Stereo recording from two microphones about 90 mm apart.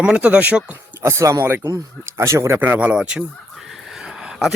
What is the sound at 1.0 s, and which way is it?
Speech, 35° right (ahead or behind).